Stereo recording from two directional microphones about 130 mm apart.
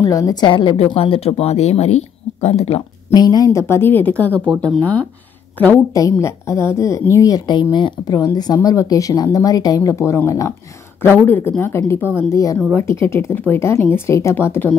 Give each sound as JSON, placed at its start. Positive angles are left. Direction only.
{"t": 0.0, "sound": "a woman's voice", "side_deg": 25}
{"t": 3.1, "sound": "speech", "side_deg": 30}
{"t": 6.1, "sound": "speech", "side_deg": 20}